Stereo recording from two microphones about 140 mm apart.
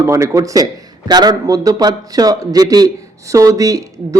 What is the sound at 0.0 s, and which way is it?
A man's voice, 20° right (ahead or behind).